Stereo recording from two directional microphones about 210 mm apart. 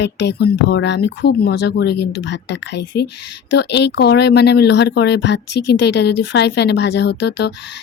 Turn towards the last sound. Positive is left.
turn(degrees=55)  # may be behind; listen again after turning